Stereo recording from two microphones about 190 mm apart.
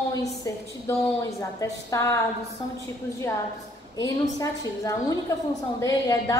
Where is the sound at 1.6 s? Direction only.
15° left (ahead or behind).